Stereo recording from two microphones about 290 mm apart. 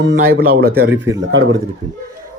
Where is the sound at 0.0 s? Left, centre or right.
Right.